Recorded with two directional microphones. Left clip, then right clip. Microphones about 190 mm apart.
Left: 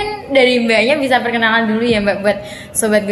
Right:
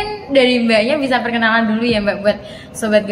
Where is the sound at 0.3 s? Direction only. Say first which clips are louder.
Left 1 dB; 20° left (ahead or behind).